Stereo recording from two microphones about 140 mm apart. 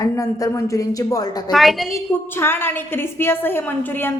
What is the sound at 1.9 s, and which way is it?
A woman's voice, 20° left (ahead or behind).